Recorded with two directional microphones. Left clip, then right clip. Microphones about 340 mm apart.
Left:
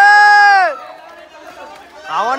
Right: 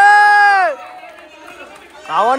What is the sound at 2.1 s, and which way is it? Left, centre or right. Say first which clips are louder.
Run: right 3 dB; centre.